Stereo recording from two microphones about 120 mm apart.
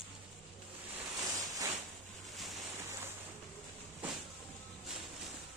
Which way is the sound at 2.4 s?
Centre (ahead or behind).